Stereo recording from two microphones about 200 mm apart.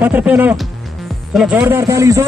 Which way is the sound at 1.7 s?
15° right (ahead or behind).